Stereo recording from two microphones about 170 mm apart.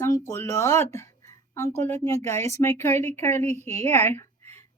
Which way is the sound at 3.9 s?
15° left (ahead or behind).